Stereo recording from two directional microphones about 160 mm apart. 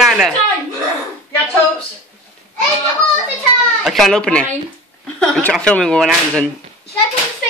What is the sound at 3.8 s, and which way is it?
Speech, centre (ahead or behind).